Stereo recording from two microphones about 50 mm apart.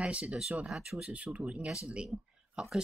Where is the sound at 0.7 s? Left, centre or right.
Centre.